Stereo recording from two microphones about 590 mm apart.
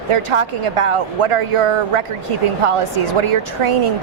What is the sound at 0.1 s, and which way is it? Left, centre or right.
A woman's voice, right.